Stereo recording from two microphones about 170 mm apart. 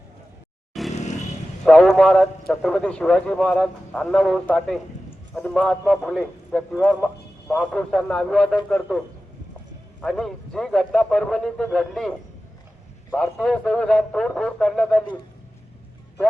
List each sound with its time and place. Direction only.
0.7 s vehicle: centre (ahead or behind)
0.9 s vehicle: 40° left (ahead or behind)
1.6 s a man's voice: 5° left (ahead or behind)
10.0 s a man's voice: 5° left (ahead or behind)